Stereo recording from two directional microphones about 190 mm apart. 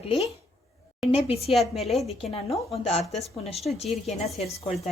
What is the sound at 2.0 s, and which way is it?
Speech, 30° left (ahead or behind).